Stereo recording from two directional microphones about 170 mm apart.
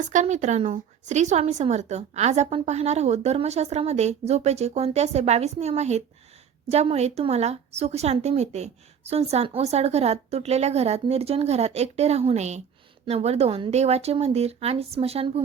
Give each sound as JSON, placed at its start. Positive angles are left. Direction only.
{"t": 0.0, "sound": "speech", "side_deg": -45}